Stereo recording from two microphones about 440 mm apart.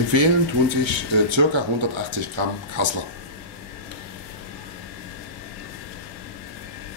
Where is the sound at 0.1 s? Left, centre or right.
Right.